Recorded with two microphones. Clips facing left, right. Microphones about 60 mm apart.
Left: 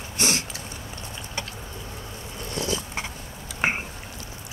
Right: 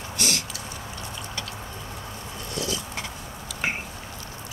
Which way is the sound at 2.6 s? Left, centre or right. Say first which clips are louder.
Left 2 dB; left.